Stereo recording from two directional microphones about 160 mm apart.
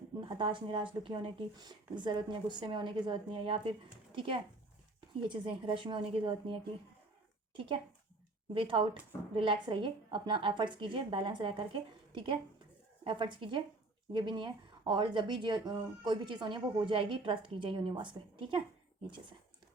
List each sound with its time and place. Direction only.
0.3 s a woman's voice: 30° right (ahead or behind)